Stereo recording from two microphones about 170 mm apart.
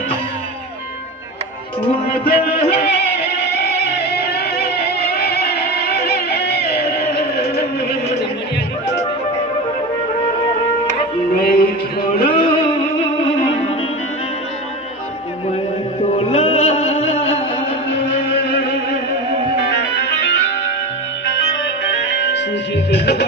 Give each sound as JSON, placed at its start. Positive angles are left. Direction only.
{"t": 1.9, "sound": "music", "side_deg": 35}
{"t": 3.0, "sound": "music", "side_deg": 70}
{"t": 11.3, "sound": "music", "side_deg": 60}
{"t": 12.3, "sound": "music", "side_deg": 30}
{"t": 16.3, "sound": "music", "side_deg": 35}
{"t": 19.8, "sound": "music", "side_deg": 90}
{"t": 21.4, "sound": "music", "side_deg": 90}